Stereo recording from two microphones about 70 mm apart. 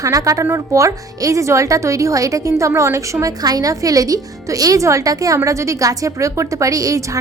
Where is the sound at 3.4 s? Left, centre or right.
Right.